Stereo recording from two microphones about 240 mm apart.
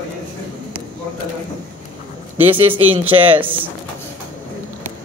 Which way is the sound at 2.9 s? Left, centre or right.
Right.